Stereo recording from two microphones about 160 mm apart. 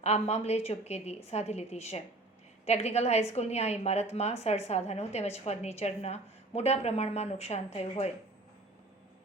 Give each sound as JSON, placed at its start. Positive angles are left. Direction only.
{"t": 0.0, "sound": "a woman's voice", "side_deg": 40}